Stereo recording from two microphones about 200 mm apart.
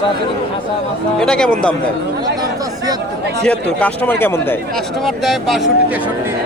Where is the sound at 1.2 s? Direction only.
5° left (ahead or behind).